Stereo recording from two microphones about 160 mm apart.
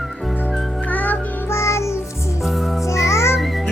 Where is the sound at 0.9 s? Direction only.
10° left (ahead or behind).